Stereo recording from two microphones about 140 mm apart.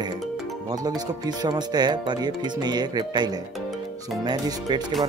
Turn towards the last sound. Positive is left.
turn(degrees=-30)  # may be behind; listen again after turning